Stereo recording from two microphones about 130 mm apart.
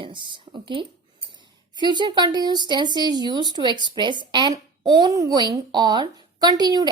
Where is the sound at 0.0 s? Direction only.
40° right (ahead or behind).